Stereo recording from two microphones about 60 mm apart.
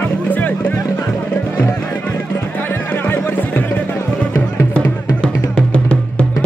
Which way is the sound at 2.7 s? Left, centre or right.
Left.